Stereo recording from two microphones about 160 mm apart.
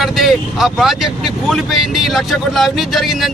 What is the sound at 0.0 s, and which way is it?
Speech, centre (ahead or behind).